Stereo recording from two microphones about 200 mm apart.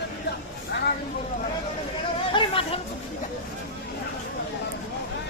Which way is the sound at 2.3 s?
25° left (ahead or behind).